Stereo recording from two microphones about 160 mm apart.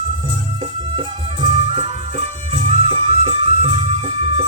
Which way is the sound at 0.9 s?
35° right (ahead or behind).